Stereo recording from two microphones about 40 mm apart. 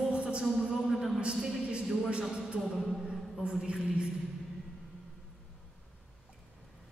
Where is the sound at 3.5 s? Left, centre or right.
Centre.